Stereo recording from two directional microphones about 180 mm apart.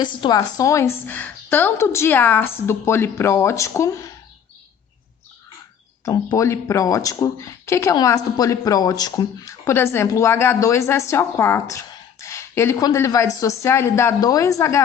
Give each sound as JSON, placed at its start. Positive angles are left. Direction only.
{"t": 0.0, "sound": "speech", "side_deg": 25}
{"t": 6.1, "sound": "speech", "side_deg": 15}